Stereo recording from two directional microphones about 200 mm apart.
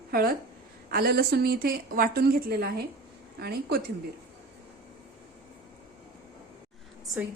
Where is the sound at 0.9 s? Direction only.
50° right (ahead or behind).